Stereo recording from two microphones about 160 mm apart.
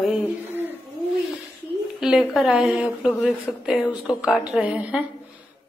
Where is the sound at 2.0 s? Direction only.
5° right (ahead or behind).